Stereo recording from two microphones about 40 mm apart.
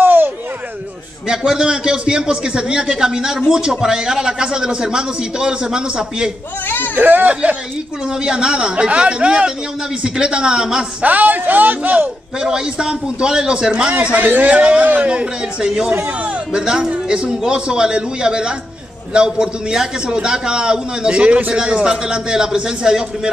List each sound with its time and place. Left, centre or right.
0.0 s a sound: right
1.2 s a man's voice: centre
7.0 s speech: right
8.1 s a man's voice: centre
11.0 s speech: right
12.4 s a man's voice: centre
14.1 s speech: right
14.5 s a man's voice: right